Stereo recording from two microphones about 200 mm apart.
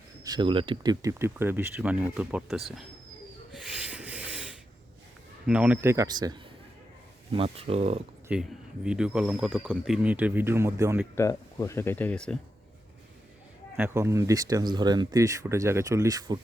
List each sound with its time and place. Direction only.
0.3 s speech: 25° right (ahead or behind); by 2.8 s centre (ahead or behind)
3.5 s rub: 5° right (ahead or behind)
5.5 s speech: 5° right (ahead or behind); by 8.0 s 30° right (ahead or behind)
8.3 s speech: 5° right (ahead or behind)
11.1 s speech: 15° left (ahead or behind)
13.7 s speech: 10° right (ahead or behind)